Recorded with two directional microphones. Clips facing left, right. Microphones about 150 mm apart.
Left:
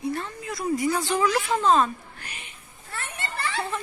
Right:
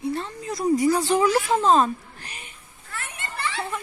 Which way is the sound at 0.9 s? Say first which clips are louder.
Right 3 dB; 35° right (ahead or behind).